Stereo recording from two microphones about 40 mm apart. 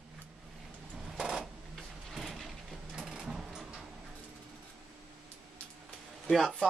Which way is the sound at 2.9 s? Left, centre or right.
Centre.